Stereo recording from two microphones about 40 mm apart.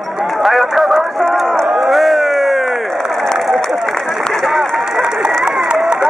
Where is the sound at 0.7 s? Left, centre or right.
Centre.